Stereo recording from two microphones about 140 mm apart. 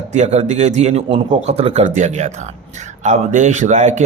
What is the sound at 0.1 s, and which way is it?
A man's voice, 55° right (ahead or behind).